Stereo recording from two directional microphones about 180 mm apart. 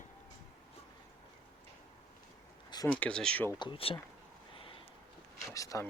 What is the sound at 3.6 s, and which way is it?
Speech, 30° left (ahead or behind).